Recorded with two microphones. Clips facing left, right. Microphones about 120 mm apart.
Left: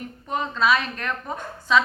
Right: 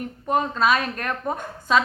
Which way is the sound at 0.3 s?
45° right (ahead or behind).